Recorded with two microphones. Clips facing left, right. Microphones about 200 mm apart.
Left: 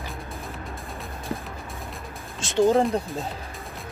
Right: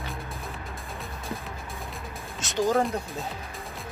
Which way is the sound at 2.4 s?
30° left (ahead or behind).